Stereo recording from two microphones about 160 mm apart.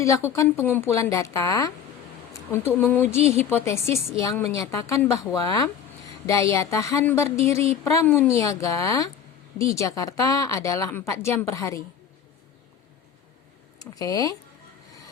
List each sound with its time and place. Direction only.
0.0 s a woman's voice: 15° left (ahead or behind)
13.7 s speech: 20° left (ahead or behind)